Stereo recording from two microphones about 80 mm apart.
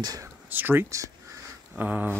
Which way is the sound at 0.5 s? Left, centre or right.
Right.